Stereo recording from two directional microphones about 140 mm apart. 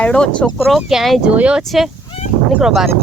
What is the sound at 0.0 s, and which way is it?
Speech, 5° left (ahead or behind).